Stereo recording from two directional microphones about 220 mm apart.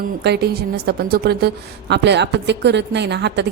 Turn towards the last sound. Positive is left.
turn(degrees=-50)  # may be behind; listen again after turning